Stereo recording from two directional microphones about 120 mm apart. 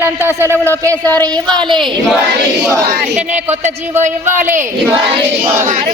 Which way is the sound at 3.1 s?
75° right (ahead or behind).